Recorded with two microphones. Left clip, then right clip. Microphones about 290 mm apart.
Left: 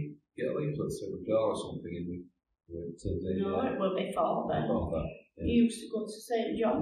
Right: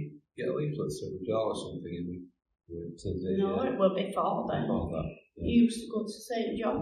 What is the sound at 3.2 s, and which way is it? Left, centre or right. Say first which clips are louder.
A man's voice: right 2 dB; centre.